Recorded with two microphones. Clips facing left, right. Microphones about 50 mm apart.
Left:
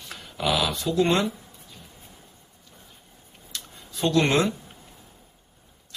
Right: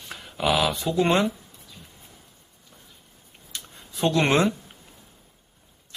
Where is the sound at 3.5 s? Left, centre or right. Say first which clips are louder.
Even; centre.